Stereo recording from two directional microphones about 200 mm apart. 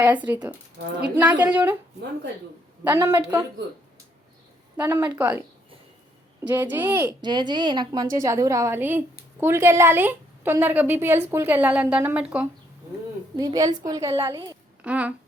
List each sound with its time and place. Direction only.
0.0 s a woman's voice: 10° right (ahead or behind)
0.8 s a woman's voice: 55° right (ahead or behind)
1.1 s a woman's voice: 10° right (ahead or behind)
2.8 s a woman's voice: 10° right (ahead or behind)
4.8 s a woman's voice: 10° right (ahead or behind)
6.5 s a woman's voice: 15° right (ahead or behind)
7.2 s a woman's voice: 20° right (ahead or behind); by 12.5 s 5° right (ahead or behind)
13.4 s a woman's voice: 20° right (ahead or behind)